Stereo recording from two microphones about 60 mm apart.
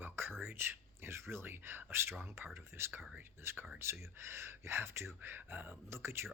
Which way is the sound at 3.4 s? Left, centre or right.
Right.